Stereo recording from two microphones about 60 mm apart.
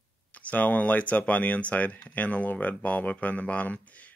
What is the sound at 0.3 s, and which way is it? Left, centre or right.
Speech, left.